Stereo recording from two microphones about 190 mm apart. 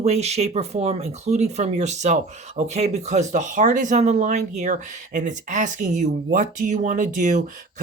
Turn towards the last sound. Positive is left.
turn(degrees=-40)  # may be behind; listen again after turning